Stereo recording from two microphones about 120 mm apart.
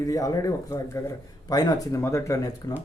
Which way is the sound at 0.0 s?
30° left (ahead or behind).